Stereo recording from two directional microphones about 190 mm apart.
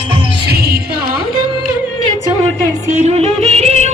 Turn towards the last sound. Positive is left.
turn(degrees=-35)  # may be behind; listen again after turning